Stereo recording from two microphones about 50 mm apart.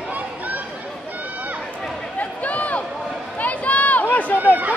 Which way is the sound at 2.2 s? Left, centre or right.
Left.